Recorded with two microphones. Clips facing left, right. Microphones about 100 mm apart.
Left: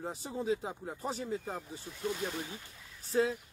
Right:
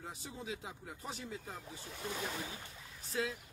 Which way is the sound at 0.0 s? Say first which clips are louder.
Left 9 dB; 35° left (ahead or behind).